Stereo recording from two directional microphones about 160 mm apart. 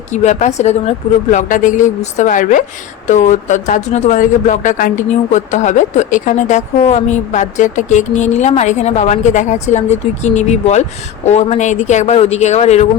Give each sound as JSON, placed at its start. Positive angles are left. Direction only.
{"t": 0.1, "sound": "a woman's voice", "side_deg": 45}